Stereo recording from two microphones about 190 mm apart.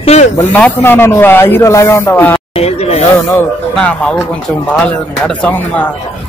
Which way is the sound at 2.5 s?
35° left (ahead or behind).